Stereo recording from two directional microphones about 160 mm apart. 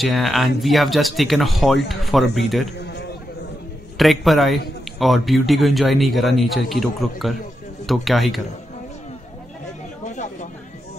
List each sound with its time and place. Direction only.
0.0 s a man's voice: centre (ahead or behind)
2.8 s a sound: 90° left
4.0 s a man's voice: centre (ahead or behind)
10.0 s chatter: 50° left (ahead or behind)